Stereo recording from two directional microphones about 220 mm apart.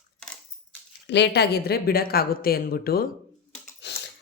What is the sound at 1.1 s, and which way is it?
A woman's voice, 50° left (ahead or behind).